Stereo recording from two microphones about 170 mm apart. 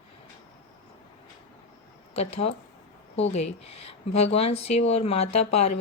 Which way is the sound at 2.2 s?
40° left (ahead or behind).